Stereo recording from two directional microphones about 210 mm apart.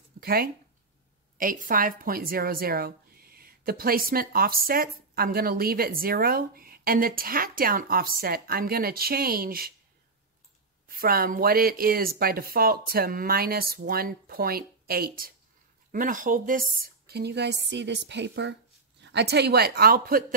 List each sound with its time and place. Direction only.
0.2 s a woman's voice: 45° right (ahead or behind)
10.9 s a woman's voice: 45° right (ahead or behind)